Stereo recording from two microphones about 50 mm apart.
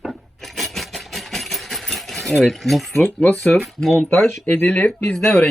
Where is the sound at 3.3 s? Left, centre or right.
Centre.